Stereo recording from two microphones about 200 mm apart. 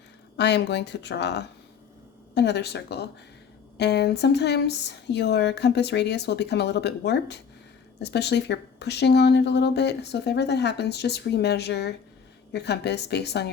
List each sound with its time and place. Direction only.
0.3 s speech: 60° left (ahead or behind)